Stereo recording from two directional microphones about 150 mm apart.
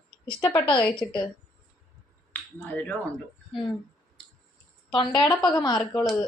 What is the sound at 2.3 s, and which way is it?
Speech, 10° left (ahead or behind).